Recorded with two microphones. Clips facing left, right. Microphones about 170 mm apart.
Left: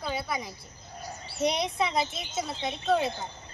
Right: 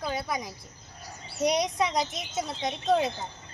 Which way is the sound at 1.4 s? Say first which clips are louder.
Right 2 dB; 15° right (ahead or behind).